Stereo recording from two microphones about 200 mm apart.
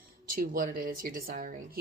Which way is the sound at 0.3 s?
45° right (ahead or behind).